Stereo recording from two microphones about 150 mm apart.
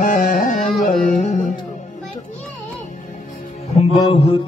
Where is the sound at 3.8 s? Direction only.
40° left (ahead or behind).